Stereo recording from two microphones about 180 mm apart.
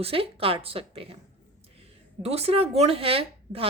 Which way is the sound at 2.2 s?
35° right (ahead or behind).